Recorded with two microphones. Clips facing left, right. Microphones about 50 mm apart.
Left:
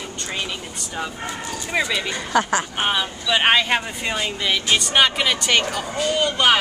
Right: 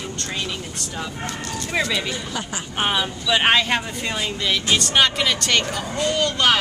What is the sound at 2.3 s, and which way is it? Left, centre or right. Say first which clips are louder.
Speech: left 9 dB; left.